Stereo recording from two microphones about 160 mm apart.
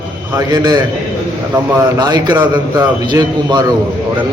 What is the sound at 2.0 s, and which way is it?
A man's voice, 25° right (ahead or behind).